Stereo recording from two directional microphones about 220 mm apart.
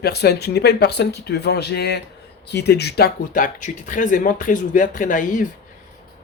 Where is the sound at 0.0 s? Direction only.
45° left (ahead or behind).